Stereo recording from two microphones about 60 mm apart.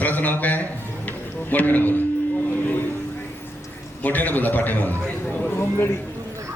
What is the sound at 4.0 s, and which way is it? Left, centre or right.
Speech, left.